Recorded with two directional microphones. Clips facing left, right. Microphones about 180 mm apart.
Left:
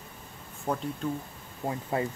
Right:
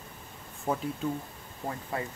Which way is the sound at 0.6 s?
5° right (ahead or behind).